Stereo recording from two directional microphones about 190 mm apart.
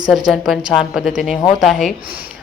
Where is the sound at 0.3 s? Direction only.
Centre (ahead or behind).